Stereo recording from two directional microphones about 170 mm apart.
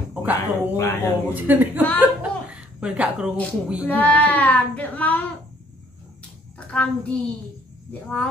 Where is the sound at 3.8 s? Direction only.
10° left (ahead or behind).